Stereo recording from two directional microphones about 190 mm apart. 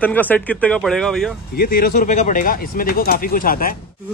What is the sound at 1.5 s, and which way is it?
Speech, 50° left (ahead or behind).